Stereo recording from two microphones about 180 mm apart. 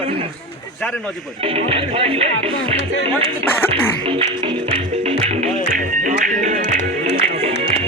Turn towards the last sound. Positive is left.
turn(degrees=-45)  # may be behind; listen again after turning